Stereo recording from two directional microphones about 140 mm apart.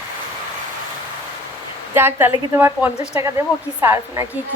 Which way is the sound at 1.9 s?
15° right (ahead or behind).